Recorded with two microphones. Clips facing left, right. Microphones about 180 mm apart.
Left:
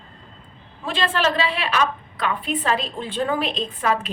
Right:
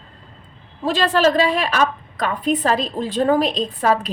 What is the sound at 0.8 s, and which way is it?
A woman's voice, 40° right (ahead or behind).